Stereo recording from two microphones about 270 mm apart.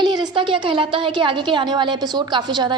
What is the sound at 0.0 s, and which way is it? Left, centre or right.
A woman's voice, centre.